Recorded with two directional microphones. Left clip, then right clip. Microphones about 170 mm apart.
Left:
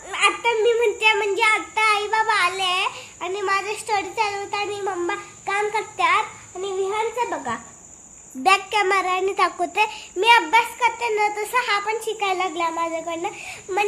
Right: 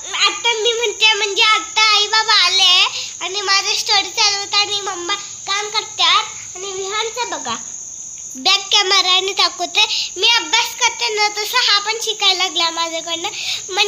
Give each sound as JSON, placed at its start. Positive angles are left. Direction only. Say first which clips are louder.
{"t": 0.1, "sound": "a sound", "louder": "right 3 dB", "side_deg": 0}
{"t": 0.5, "sound": "child singing", "louder": "right 1 dB", "side_deg": 10}
{"t": 1.7, "sound": "child singing", "louder": "right 6 dB", "side_deg": 0}
{"t": 5.1, "sound": "insect", "louder": "right 4 dB", "side_deg": 15}
{"t": 7.2, "sound": "cricket", "louder": "right 2 dB", "side_deg": -10}
{"t": 8.4, "sound": "a child's voice", "louder": "right 4 dB", "side_deg": 5}
{"t": 10.2, "sound": "child singing", "louder": "even", "side_deg": 20}
{"t": 10.6, "sound": "a child's voice", "louder": "right 3 dB", "side_deg": 10}